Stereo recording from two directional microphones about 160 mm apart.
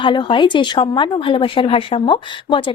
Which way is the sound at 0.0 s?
30° left (ahead or behind).